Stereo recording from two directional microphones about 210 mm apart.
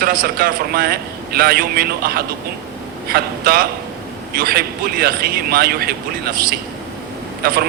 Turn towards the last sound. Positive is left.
turn(degrees=-45)  # may be behind; listen again after turning